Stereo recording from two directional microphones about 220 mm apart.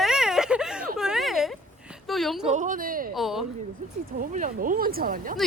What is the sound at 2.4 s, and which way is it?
Speech, 35° right (ahead or behind).